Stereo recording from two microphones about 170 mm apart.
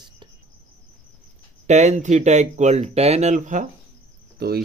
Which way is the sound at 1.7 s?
45° right (ahead or behind).